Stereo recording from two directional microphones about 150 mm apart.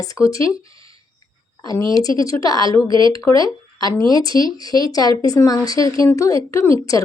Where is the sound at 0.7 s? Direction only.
35° right (ahead or behind).